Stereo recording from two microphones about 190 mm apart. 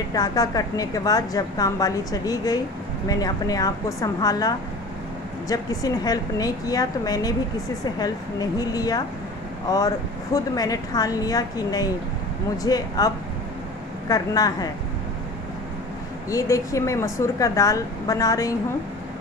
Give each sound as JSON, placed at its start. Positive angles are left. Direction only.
{"t": 0.1, "sound": "a woman's voice", "side_deg": 20}
{"t": 16.3, "sound": "speech", "side_deg": 15}